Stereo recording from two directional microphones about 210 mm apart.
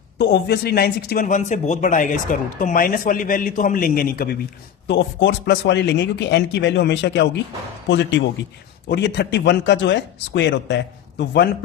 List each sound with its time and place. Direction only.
0.2 s a man's voice: 50° left (ahead or behind)
4.9 s a man's voice: 55° left (ahead or behind)